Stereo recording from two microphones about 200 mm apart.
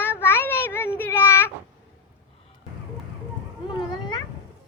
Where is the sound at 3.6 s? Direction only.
25° left (ahead or behind).